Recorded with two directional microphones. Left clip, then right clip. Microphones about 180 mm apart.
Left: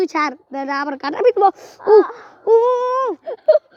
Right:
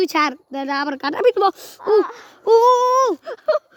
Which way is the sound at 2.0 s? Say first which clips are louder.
Left 2 dB; 25° right (ahead or behind).